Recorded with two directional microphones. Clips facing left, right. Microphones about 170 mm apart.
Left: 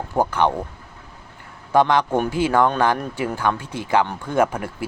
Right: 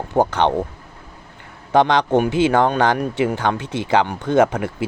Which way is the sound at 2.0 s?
20° right (ahead or behind).